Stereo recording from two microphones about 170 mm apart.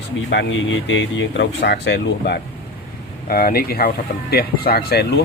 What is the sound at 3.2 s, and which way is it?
Speech, 60° left (ahead or behind).